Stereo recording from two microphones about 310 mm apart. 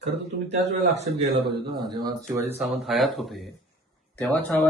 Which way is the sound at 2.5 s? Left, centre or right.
Centre.